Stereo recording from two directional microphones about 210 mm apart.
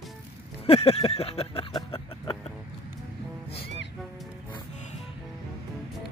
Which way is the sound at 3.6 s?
55° left (ahead or behind).